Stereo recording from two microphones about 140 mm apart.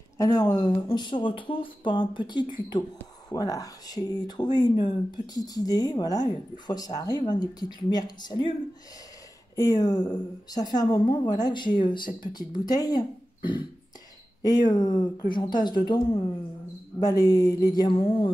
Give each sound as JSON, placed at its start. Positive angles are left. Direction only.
{"t": 0.2, "sound": "speech", "side_deg": 30}
{"t": 9.6, "sound": "speech", "side_deg": 25}
{"t": 17.0, "sound": "speech", "side_deg": 25}